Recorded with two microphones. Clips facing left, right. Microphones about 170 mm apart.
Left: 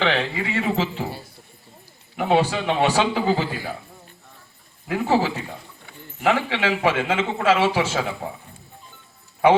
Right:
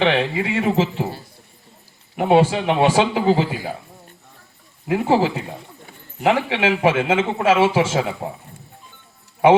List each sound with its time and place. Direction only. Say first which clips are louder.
0.0 s speech: right 4 dB; 25° right (ahead or behind)
2.1 s speech: right 4 dB; 25° right (ahead or behind)
4.9 s speech: right 3 dB; 25° right (ahead or behind)